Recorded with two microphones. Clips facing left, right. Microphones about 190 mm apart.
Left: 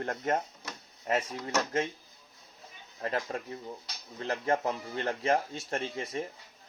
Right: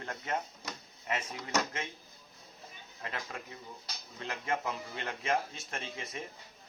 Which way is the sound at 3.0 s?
40° left (ahead or behind).